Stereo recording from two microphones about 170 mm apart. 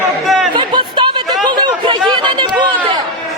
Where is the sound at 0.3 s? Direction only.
Centre (ahead or behind).